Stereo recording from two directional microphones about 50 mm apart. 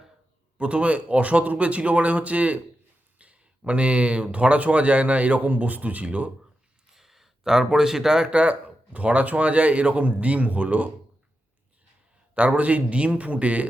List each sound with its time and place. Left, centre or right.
0.6 s speech: right
6.9 s speech: centre; by 10.8 s right
12.3 s speech: right